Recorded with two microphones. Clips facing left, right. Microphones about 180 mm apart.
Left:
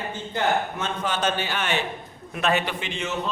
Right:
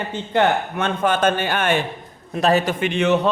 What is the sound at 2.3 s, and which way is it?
Speech, 35° right (ahead or behind).